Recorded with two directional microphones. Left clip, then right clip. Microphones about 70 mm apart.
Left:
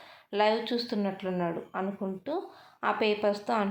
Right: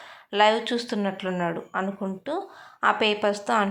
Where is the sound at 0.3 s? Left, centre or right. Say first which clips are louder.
Right 6 dB; right.